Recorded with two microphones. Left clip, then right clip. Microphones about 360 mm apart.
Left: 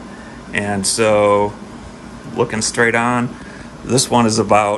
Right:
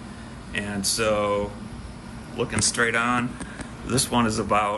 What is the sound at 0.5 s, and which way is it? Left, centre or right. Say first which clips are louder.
Speech: left 9 dB; centre.